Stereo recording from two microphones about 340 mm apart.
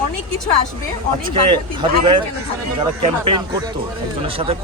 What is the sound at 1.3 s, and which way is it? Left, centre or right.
Speech, centre.